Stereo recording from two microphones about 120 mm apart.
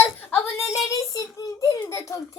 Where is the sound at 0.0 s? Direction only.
15° left (ahead or behind).